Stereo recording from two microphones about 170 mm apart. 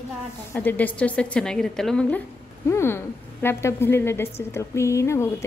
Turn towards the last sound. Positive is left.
turn(degrees=15)  # may be behind; listen again after turning